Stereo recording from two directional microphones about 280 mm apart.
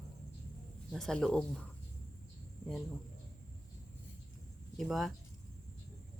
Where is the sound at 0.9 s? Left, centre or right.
Centre.